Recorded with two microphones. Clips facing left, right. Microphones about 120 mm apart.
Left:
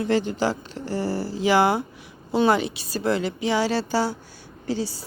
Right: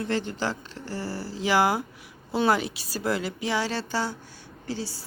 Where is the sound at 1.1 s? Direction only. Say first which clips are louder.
Left 7 dB; 55° left (ahead or behind).